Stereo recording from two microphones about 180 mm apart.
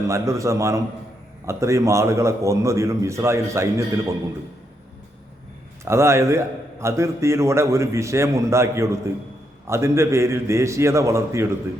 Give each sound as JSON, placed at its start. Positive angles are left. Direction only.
{"t": 0.1, "sound": "a man's voice", "side_deg": -15}
{"t": 5.8, "sound": "a man's voice", "side_deg": -15}